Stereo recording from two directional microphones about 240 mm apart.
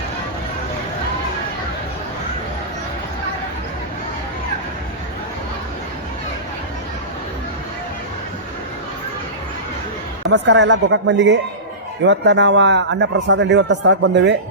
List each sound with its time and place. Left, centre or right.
10.3 s a man's voice: right